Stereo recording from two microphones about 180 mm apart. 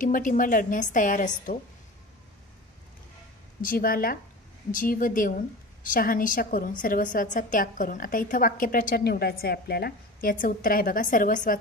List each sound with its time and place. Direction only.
0.0 s a woman's voice: 45° left (ahead or behind)
3.6 s a woman's voice: 55° left (ahead or behind)